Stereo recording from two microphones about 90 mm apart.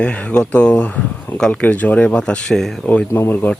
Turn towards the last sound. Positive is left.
turn(degrees=30)  # may be behind; listen again after turning